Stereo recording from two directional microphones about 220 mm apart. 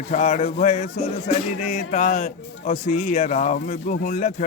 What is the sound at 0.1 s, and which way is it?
Speech, 30° left (ahead or behind).